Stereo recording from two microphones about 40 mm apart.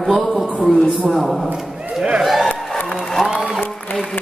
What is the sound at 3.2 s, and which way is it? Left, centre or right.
Applause, centre.